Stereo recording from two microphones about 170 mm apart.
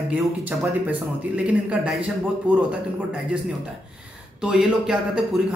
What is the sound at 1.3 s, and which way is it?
A man's voice, 5° right (ahead or behind).